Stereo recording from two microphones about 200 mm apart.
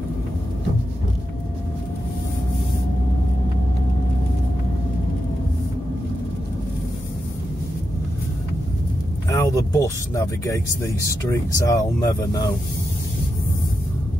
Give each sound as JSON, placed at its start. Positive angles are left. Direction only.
{"t": 9.3, "sound": "speech", "side_deg": 15}